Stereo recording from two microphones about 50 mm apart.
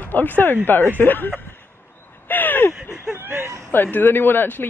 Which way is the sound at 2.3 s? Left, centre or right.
Left.